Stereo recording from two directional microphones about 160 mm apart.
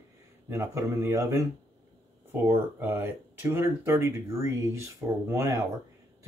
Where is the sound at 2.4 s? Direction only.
15° right (ahead or behind).